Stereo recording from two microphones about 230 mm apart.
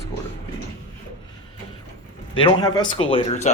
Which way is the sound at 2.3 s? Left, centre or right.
Left.